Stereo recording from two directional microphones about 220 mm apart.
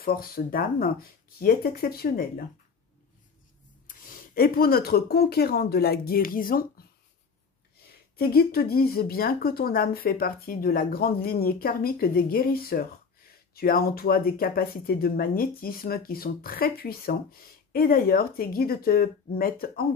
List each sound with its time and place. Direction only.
0.0 s speech: 40° left (ahead or behind)
3.8 s speech: 40° left (ahead or behind)
8.2 s speech: 45° left (ahead or behind)